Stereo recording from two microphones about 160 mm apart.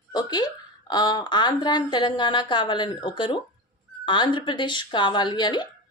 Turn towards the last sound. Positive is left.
turn(degrees=30)  # may be behind; listen again after turning